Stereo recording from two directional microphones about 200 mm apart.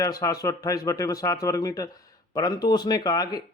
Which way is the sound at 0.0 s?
15° left (ahead or behind).